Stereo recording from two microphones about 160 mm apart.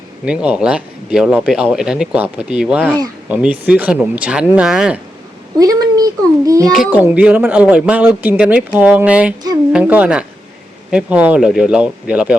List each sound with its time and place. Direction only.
0.3 s speech: 5° right (ahead or behind)
5.5 s a child's voice: 25° right (ahead or behind)
6.7 s speech: 10° right (ahead or behind)